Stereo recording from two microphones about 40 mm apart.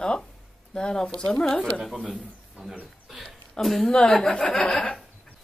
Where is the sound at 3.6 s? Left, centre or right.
Centre.